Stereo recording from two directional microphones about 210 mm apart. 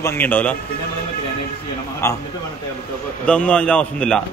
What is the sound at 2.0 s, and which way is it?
Speech, 15° left (ahead or behind).